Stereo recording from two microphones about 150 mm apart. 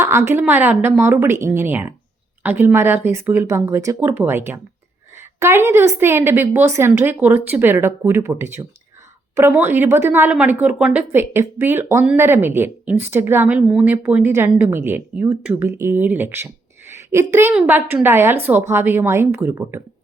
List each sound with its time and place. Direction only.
0.0 s a woman's voice: 15° right (ahead or behind)